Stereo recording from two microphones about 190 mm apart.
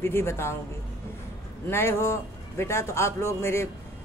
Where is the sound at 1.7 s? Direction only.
15° left (ahead or behind).